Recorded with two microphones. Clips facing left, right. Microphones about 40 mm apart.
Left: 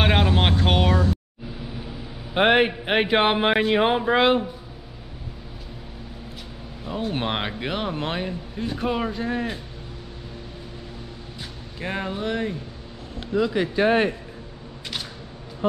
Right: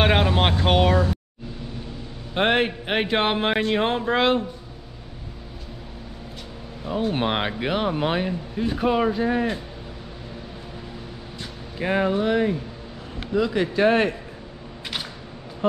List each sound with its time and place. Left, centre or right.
0.0 s vehicle: centre
1.5 s a man's voice: centre
6.8 s speech: centre
11.8 s speech: centre